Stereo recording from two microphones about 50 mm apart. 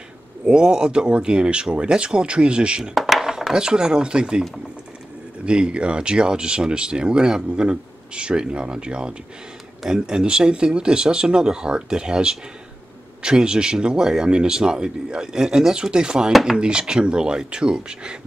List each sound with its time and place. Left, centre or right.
0.5 s speech: centre
2.9 s speech: centre
16.3 s speech: centre
16.5 s speech: centre